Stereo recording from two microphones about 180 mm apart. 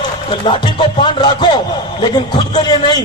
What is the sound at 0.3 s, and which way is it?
Speech, 30° left (ahead or behind).